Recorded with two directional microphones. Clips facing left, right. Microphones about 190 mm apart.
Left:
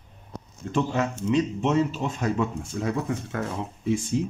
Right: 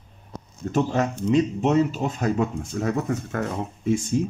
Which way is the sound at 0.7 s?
40° right (ahead or behind).